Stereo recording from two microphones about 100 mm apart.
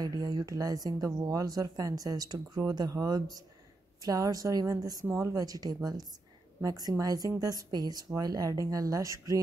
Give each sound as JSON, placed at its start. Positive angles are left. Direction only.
{"t": 0.0, "sound": "speech", "side_deg": -40}